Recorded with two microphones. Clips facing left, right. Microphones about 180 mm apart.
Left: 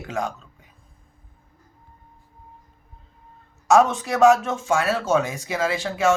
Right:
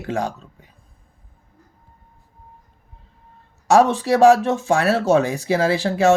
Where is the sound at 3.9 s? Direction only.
30° right (ahead or behind).